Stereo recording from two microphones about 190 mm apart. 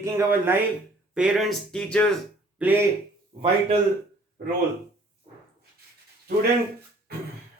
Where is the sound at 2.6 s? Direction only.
5° right (ahead or behind).